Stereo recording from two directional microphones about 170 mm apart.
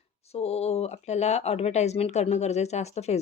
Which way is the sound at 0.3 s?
40° left (ahead or behind).